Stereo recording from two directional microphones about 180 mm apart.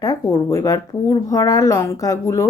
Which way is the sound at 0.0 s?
20° left (ahead or behind).